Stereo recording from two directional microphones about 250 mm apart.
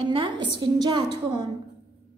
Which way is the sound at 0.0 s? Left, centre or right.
Centre.